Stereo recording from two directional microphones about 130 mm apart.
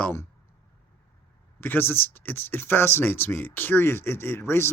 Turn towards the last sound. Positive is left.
turn(degrees=20)  # may be behind; listen again after turning